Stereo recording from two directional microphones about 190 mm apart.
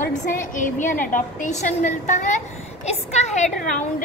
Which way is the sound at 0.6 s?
40° left (ahead or behind).